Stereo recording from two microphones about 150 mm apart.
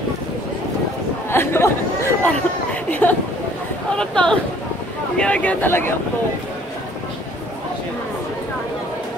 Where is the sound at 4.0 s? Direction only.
5° left (ahead or behind).